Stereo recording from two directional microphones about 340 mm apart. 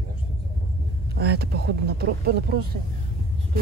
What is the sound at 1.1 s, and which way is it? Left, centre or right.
Speech, right.